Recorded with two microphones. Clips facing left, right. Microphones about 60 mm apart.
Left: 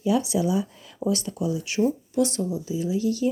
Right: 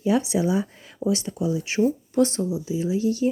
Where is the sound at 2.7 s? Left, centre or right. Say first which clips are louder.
Right 1 dB; right.